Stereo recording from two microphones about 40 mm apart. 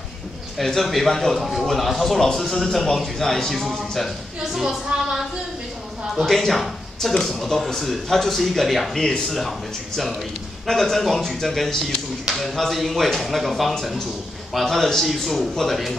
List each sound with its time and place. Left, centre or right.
0.6 s a man's voice: centre
4.4 s a woman's voice: centre
6.2 s speech: centre
10.7 s a man's voice: centre